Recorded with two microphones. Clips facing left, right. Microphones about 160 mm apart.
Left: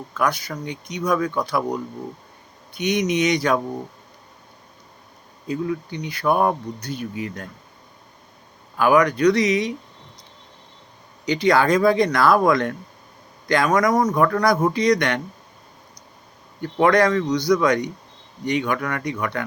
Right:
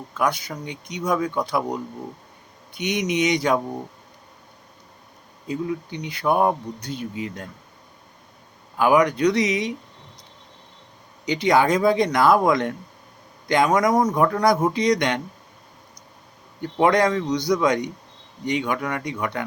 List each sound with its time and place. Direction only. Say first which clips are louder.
0.2 s speech: left 1 dB; 20° right (ahead or behind)
5.5 s speech: left 2 dB; 20° right (ahead or behind)
8.8 s speech: left 1 dB; 20° right (ahead or behind)
11.3 s speech: left 1 dB; 20° right (ahead or behind)
16.6 s speech: left 1 dB; 20° right (ahead or behind)